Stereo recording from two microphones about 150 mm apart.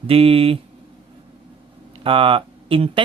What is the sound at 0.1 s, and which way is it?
Speech, 40° right (ahead or behind).